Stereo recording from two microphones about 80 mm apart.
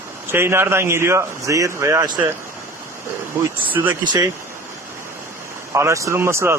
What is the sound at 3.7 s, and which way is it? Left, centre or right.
Speech, right.